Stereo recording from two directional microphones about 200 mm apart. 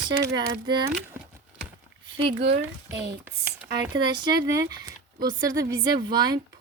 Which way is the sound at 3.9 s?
20° right (ahead or behind).